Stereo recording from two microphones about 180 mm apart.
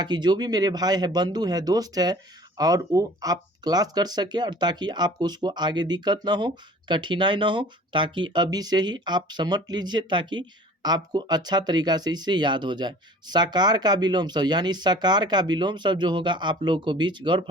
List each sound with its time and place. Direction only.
0.0 s speech: 25° right (ahead or behind)